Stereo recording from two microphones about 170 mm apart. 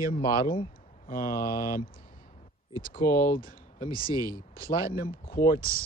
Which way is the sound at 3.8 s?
25° right (ahead or behind).